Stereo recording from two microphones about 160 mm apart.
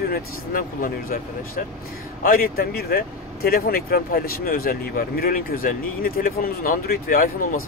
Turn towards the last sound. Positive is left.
turn(degrees=60)  # may be behind; listen again after turning